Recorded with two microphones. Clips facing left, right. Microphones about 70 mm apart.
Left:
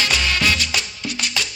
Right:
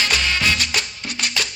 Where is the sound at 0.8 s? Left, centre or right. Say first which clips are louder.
Even; right.